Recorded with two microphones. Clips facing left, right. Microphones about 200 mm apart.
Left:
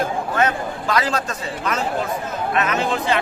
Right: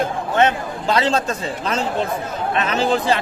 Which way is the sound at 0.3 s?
25° right (ahead or behind).